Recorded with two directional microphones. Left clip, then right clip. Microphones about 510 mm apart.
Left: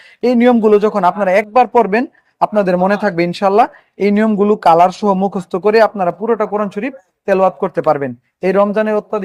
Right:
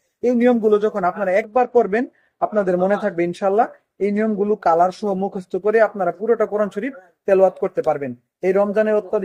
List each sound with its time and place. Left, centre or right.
0.3 s speech: left